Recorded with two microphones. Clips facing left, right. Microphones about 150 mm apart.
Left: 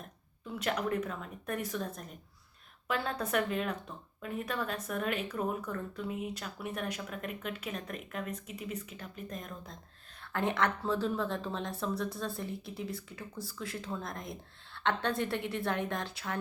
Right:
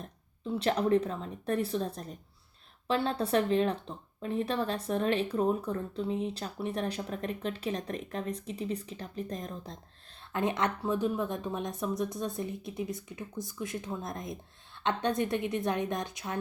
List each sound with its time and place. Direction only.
0.0 s speech: 30° right (ahead or behind)
10.3 s a woman's voice: 20° right (ahead or behind)